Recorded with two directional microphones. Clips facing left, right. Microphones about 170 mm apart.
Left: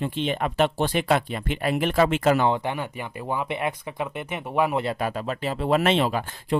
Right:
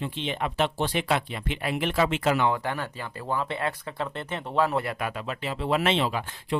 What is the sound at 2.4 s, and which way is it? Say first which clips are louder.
Speech: left 2 dB; 20° left (ahead or behind).